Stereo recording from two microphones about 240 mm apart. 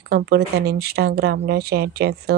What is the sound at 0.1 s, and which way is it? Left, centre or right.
Speech, right.